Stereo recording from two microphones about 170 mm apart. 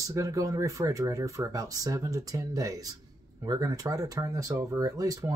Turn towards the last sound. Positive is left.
turn(degrees=-20)  # may be behind; listen again after turning